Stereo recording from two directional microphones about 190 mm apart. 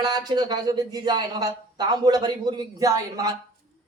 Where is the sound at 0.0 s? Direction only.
20° right (ahead or behind).